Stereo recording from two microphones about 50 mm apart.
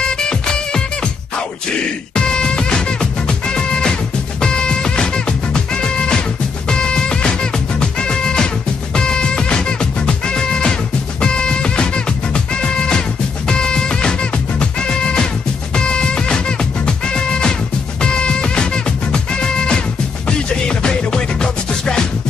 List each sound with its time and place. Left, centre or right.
0.0 s music: centre
2.1 s music: centre